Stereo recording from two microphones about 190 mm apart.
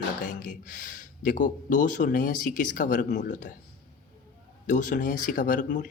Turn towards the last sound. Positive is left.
turn(degrees=45)  # may be behind; listen again after turning